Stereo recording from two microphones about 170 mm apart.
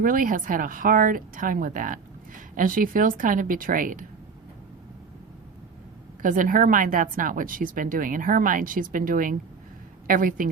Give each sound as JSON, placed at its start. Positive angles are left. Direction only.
{"t": 0.0, "sound": "a woman's voice", "side_deg": -55}
{"t": 6.2, "sound": "a woman's voice", "side_deg": -50}